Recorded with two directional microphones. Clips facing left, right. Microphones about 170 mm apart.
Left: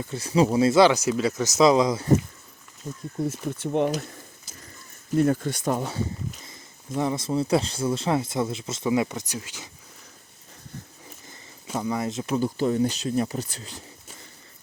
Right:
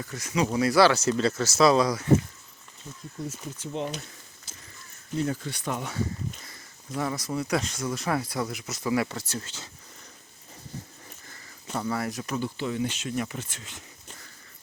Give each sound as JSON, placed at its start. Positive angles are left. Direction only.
{"t": 0.0, "sound": "speech", "side_deg": 30}
{"t": 2.8, "sound": "speech", "side_deg": 45}
{"t": 3.2, "sound": "speech", "side_deg": 60}
{"t": 5.1, "sound": "speech", "side_deg": 55}
{"t": 6.4, "sound": "speech", "side_deg": 20}
{"t": 11.8, "sound": "speech", "side_deg": 20}
{"t": 12.3, "sound": "speech", "side_deg": 40}